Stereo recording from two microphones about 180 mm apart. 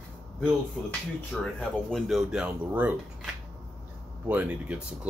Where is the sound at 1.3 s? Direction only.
5° left (ahead or behind).